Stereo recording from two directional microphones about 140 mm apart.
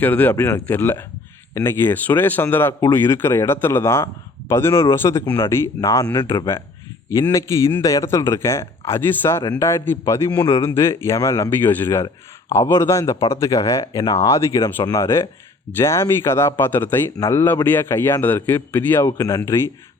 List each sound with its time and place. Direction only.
0.0 s a man's voice: 10° left (ahead or behind)